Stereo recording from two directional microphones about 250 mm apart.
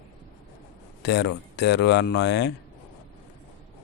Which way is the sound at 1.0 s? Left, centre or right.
Left.